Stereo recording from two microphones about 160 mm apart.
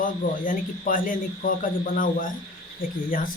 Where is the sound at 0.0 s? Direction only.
60° left (ahead or behind).